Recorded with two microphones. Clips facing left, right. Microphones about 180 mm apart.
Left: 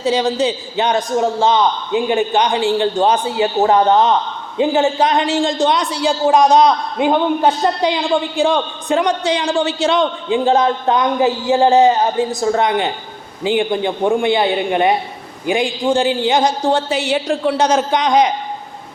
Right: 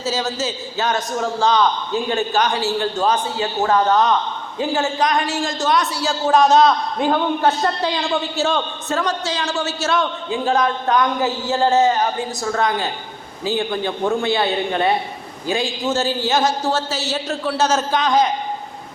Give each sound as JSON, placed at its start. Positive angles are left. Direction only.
{"t": 0.0, "sound": "a man's voice", "side_deg": 15}